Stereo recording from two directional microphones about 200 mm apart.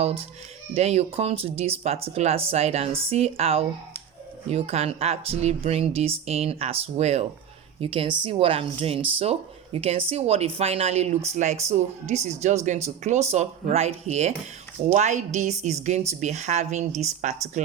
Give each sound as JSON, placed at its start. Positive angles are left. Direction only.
{"t": 0.7, "sound": "a woman's voice", "side_deg": -35}